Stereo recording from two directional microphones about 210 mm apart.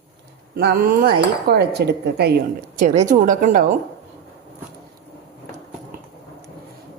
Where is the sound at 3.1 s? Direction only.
40° right (ahead or behind).